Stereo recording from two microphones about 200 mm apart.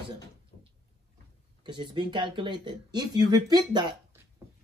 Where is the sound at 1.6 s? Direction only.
25° right (ahead or behind).